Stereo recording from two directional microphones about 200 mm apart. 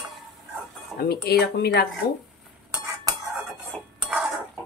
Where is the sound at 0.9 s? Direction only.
50° left (ahead or behind).